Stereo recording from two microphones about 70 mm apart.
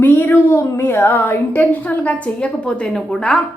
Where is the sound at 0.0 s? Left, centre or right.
Left.